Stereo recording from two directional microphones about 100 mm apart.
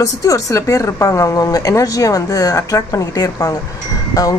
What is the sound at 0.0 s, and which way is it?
A woman's voice, 35° left (ahead or behind).